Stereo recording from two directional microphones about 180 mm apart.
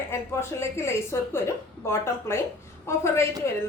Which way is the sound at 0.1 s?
15° left (ahead or behind).